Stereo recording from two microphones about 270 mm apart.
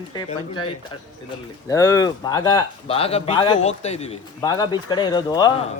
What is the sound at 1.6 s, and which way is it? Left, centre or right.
Speech, centre.